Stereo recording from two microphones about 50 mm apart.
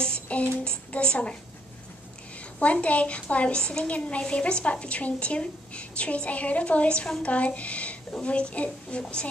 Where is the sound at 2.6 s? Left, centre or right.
Left.